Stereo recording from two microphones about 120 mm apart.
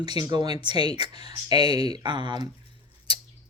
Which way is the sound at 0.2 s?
35° right (ahead or behind).